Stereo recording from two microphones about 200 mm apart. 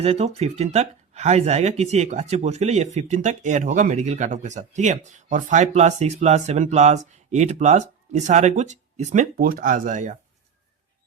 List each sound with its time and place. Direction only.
0.0 s speech: 30° right (ahead or behind)